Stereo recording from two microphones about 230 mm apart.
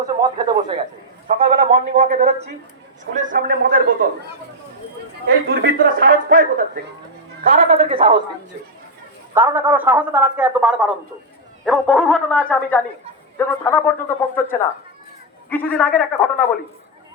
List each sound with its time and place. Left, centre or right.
0.0 s a man's voice: centre
1.3 s a man's voice: right
5.5 s a man's voice: right
9.3 s a man's voice: centre